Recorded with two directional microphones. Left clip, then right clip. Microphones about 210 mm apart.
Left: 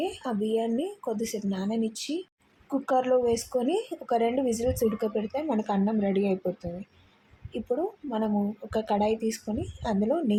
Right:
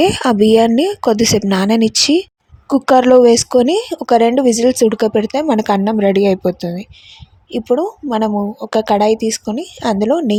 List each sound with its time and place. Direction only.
0.0 s a woman's voice: 50° right (ahead or behind)